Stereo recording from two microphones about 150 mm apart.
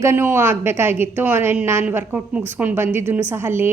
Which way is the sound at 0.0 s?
15° right (ahead or behind).